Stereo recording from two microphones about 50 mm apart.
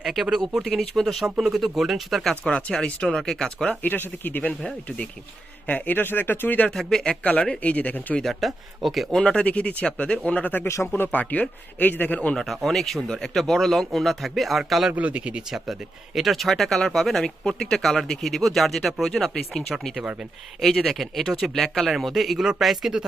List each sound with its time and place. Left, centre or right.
0.0 s speech: centre
0.6 s speech: centre
2.5 s speech: centre
3.8 s speech: left
5.6 s speech: left
6.7 s speech: centre
7.1 s speech: left
8.2 s speech: centre
9.1 s speech: centre
12.5 s speech: centre
14.9 s speech: right
16.1 s speech: centre